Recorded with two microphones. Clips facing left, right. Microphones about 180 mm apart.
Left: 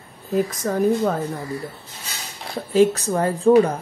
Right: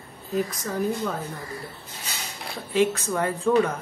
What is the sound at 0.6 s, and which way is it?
Speech, 60° left (ahead or behind).